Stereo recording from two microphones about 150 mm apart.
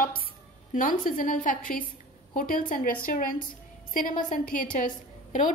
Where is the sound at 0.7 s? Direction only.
65° left (ahead or behind).